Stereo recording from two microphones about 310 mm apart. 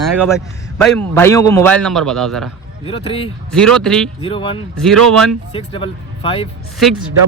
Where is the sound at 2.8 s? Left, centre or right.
Centre.